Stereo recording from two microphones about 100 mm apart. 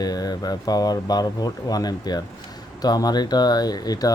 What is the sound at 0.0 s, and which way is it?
Speech, 40° left (ahead or behind).